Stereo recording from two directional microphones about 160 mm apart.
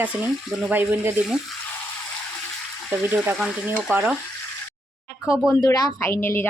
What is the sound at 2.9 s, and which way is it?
Speech, 10° right (ahead or behind).